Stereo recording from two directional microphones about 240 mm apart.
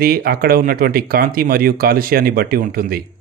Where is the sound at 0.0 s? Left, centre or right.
Right.